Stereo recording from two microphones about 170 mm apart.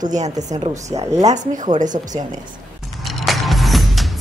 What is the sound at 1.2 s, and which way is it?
A woman's voice, 50° right (ahead or behind).